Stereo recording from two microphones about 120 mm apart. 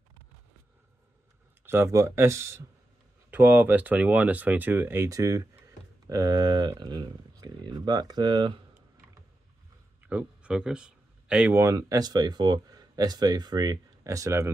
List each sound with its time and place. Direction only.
1.7 s speech: 25° right (ahead or behind); by 8.5 s 40° right (ahead or behind)
10.0 s speech: 10° right (ahead or behind)
11.6 s speech: 25° right (ahead or behind)